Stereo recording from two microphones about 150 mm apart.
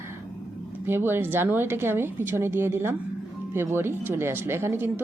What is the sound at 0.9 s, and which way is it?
A woman's voice, 15° right (ahead or behind).